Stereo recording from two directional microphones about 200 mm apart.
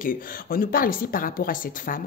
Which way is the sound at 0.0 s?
45° left (ahead or behind).